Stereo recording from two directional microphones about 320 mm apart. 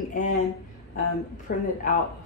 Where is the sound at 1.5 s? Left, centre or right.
Left.